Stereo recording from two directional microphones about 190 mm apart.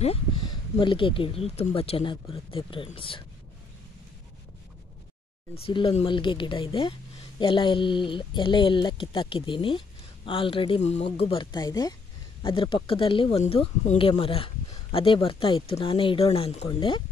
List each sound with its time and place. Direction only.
0.0 s speech: 30° left (ahead or behind)
5.5 s speech: 25° left (ahead or behind)